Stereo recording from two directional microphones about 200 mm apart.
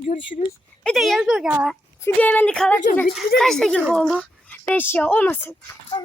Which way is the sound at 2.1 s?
10° left (ahead or behind).